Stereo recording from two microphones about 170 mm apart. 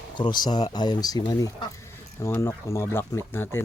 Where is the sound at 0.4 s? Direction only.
25° left (ahead or behind).